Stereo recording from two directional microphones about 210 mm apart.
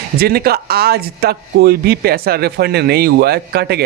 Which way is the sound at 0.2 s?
45° right (ahead or behind).